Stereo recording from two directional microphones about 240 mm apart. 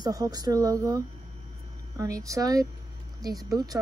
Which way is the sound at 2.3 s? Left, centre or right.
Centre.